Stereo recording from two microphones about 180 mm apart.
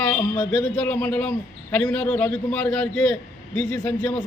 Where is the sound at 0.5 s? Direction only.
10° left (ahead or behind).